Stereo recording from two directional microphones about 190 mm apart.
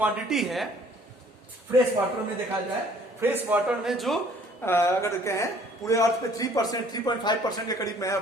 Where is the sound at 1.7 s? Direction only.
15° right (ahead or behind).